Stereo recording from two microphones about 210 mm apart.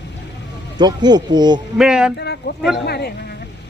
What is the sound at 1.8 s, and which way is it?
Speech, 5° right (ahead or behind).